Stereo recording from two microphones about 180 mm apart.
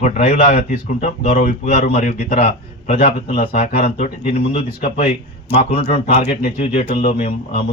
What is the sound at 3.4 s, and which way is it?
Speech, 45° left (ahead or behind).